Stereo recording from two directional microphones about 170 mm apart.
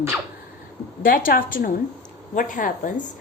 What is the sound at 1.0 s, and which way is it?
A woman's voice, 55° left (ahead or behind).